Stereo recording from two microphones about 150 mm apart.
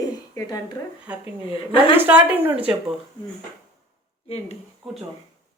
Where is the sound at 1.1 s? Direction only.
10° right (ahead or behind).